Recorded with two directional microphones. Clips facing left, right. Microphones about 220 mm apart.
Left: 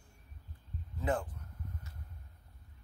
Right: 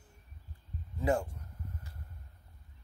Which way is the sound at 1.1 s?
25° right (ahead or behind).